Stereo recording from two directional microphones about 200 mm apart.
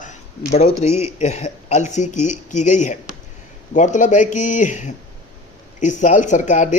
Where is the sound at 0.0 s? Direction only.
35° left (ahead or behind).